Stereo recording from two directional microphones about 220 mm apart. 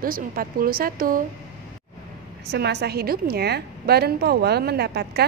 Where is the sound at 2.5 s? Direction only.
50° right (ahead or behind).